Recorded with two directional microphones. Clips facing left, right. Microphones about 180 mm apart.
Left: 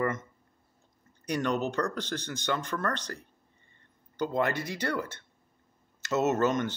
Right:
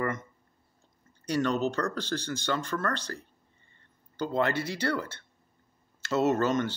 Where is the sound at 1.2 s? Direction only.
15° left (ahead or behind).